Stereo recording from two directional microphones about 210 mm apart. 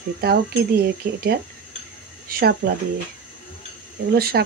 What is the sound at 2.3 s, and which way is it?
Speech, 45° right (ahead or behind).